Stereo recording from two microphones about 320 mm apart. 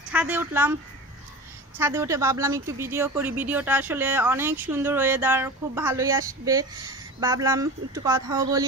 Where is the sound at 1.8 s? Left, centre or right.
Centre.